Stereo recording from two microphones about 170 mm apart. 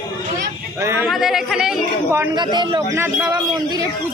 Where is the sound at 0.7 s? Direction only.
15° right (ahead or behind).